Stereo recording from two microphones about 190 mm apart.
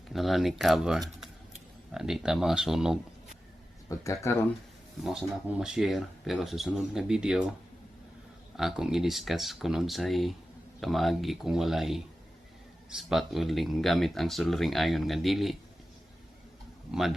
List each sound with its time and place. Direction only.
0.1 s speech: centre (ahead or behind)
3.8 s speech: 15° left (ahead or behind)
5.0 s speech: 5° right (ahead or behind)
8.5 s speech: centre (ahead or behind)
16.9 s speech: centre (ahead or behind)